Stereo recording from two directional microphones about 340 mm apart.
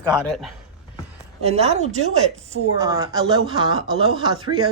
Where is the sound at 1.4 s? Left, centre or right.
Centre.